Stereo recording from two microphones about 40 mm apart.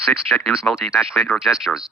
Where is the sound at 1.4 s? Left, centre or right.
Centre.